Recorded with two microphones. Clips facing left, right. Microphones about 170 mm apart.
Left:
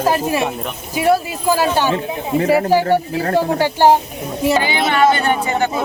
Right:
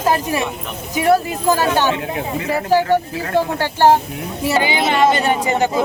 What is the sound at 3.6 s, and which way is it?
Speech, 15° left (ahead or behind).